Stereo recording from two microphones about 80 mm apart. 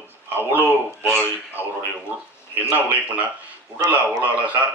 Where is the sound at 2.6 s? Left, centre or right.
Right.